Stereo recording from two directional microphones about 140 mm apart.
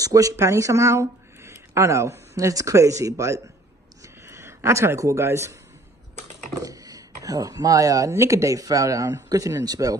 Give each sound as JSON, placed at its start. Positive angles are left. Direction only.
{"t": 0.0, "sound": "speech", "side_deg": -25}
{"t": 6.6, "sound": "speech", "side_deg": -25}